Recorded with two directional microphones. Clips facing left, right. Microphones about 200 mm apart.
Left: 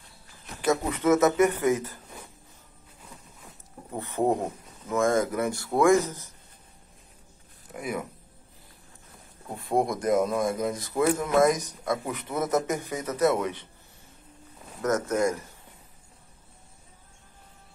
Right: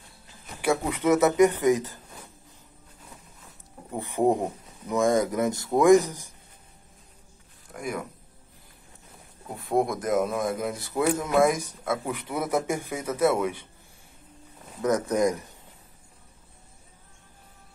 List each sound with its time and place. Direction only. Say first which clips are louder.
0.6 s speech: even; 10° right (ahead or behind)
3.9 s speech: right 2 dB; 15° right (ahead or behind)
7.7 s speech: even; 5° left (ahead or behind)
9.6 s speech: right 1 dB; centre (ahead or behind)
14.8 s speech: right 2 dB; 15° right (ahead or behind)